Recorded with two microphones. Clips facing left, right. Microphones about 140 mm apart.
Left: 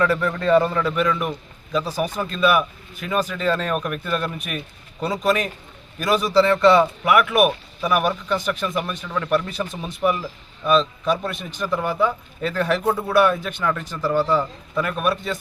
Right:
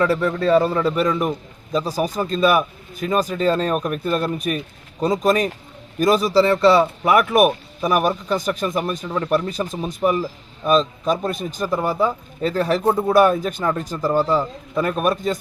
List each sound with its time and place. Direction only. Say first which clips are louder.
0.0 s speech: right 2 dB; 35° right (ahead or behind)